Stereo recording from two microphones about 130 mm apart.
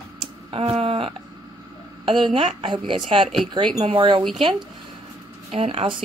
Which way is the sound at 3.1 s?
45° right (ahead or behind).